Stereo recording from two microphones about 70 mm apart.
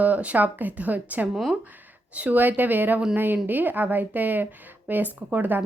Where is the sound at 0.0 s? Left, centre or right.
Right.